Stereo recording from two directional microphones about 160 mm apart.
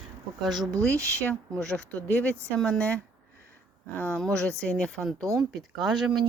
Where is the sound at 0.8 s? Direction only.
5° left (ahead or behind).